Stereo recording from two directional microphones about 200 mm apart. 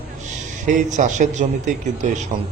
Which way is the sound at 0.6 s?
40° right (ahead or behind).